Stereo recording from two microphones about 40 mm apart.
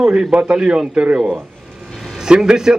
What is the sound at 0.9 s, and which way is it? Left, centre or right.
Speech, right.